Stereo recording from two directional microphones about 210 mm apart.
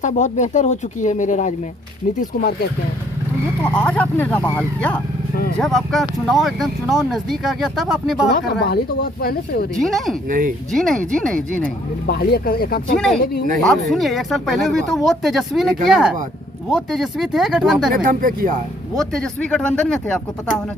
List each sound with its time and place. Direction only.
0.0 s speech: 35° left (ahead or behind)
3.6 s speech: 5° left (ahead or behind)
8.3 s speech: 50° left (ahead or behind)
9.7 s speech: centre (ahead or behind)
10.2 s speech: 40° right (ahead or behind)
10.7 s speech: 5° left (ahead or behind)
12.0 s speech: 50° left (ahead or behind)
13.6 s speech: centre (ahead or behind)
17.9 s speech: 40° right (ahead or behind)
18.9 s speech: 5° left (ahead or behind)